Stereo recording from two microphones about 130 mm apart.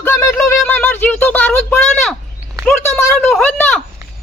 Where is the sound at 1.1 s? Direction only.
10° left (ahead or behind).